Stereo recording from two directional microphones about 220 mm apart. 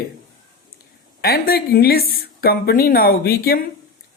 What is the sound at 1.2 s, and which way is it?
A woman's voice, 45° left (ahead or behind).